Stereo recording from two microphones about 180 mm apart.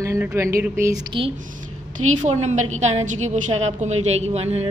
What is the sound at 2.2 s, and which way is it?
A woman's voice, 40° right (ahead or behind).